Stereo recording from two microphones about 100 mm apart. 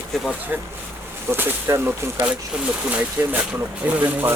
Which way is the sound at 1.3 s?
25° right (ahead or behind).